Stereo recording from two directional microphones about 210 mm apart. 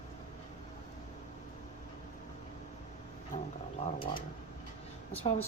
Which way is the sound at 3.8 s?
25° left (ahead or behind).